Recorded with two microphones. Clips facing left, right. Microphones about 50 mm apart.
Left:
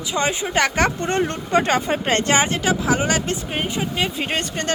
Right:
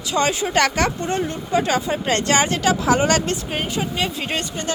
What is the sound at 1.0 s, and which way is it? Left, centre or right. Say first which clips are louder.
Speech: left 2 dB; left.